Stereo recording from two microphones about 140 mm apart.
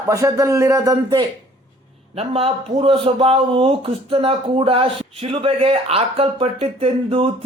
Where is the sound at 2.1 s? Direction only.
45° right (ahead or behind).